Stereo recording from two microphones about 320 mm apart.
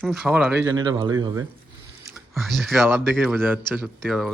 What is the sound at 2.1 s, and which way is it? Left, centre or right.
Speech, centre.